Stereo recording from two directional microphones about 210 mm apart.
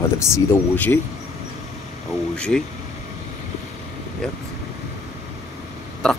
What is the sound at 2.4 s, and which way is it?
Speech, 5° left (ahead or behind).